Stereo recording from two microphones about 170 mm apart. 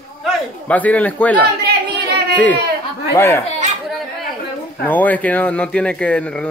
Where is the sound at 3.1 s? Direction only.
15° left (ahead or behind).